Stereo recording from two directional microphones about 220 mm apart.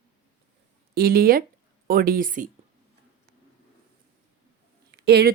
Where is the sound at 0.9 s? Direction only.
45° right (ahead or behind).